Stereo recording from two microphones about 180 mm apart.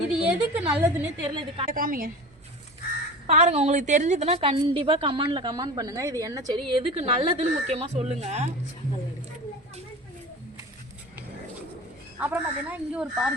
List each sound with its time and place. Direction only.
0.1 s speech: 5° right (ahead or behind)
1.2 s a woman's voice: 25° right (ahead or behind)
1.7 s a woman's voice: 50° right (ahead or behind)
3.2 s a woman's voice: 40° right (ahead or behind); by 6.6 s 20° right (ahead or behind)
6.7 s speech: 30° right (ahead or behind)
12.2 s speech: 10° right (ahead or behind)